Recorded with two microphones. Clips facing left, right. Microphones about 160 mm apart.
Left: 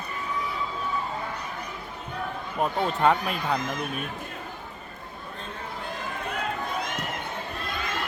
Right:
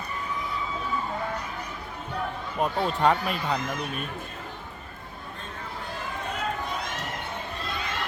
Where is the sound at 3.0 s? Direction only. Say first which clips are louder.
Left 1 dB; centre (ahead or behind).